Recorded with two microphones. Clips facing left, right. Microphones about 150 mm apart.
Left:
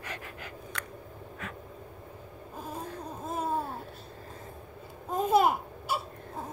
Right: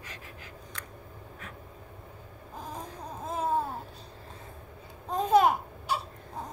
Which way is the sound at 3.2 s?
10° left (ahead or behind).